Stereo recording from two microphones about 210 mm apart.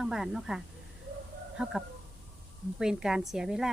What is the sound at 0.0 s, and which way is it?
Speech, centre (ahead or behind).